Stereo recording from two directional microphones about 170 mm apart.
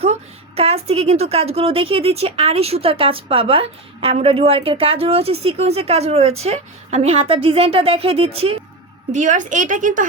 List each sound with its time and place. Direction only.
0.0 s a woman's voice: 35° right (ahead or behind)
9.1 s a woman's voice: 50° right (ahead or behind)